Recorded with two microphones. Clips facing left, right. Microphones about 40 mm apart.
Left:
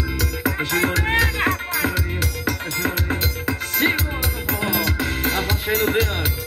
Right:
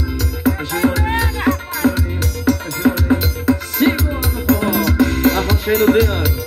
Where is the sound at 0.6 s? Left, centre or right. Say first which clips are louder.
Left 1 dB; left.